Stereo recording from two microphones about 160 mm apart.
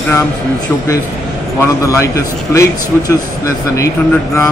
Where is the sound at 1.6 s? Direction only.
20° left (ahead or behind).